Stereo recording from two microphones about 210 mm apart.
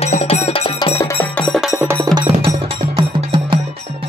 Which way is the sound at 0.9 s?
10° left (ahead or behind).